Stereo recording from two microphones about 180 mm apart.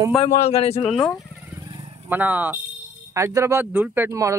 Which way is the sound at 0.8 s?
5° left (ahead or behind).